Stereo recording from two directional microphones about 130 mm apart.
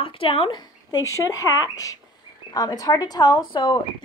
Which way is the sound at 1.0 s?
25° left (ahead or behind).